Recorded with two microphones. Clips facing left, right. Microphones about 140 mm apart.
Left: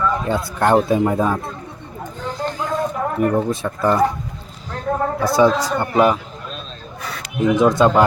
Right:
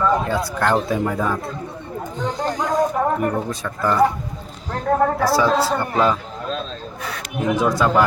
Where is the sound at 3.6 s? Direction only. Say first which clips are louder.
Left 3 dB; 25° left (ahead or behind).